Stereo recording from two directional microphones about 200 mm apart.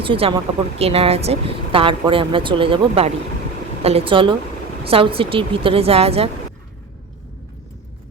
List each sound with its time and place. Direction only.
0.0 s speech: 25° right (ahead or behind)